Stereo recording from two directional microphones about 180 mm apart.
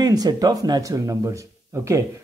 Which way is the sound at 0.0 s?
20° right (ahead or behind).